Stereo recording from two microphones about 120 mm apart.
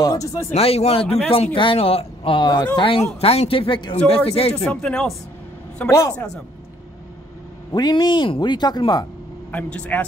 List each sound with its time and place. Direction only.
0.0 s speech: 30° left (ahead or behind)
0.6 s speech: 60° left (ahead or behind); by 3.0 s 40° left (ahead or behind)
3.2 s speech: 55° left (ahead or behind)
4.3 s speech: 55° left (ahead or behind)
4.6 s speech: 5° left (ahead or behind)
5.9 s speech: 25° left (ahead or behind)
6.1 s a man's voice: 5° left (ahead or behind)
7.7 s speech: 35° left (ahead or behind)
9.5 s speech: 10° left (ahead or behind)